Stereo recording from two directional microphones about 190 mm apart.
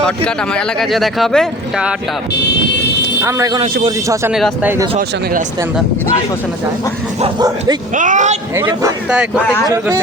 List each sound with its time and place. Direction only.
0.0 s speech: 5° left (ahead or behind)
3.2 s speech: 15° right (ahead or behind)
4.3 s speech: centre (ahead or behind)
7.3 s speech: 20° right (ahead or behind)
7.9 s speech: 40° right (ahead or behind)
8.5 s speech: 10° right (ahead or behind)
9.6 s speech: 15° right (ahead or behind)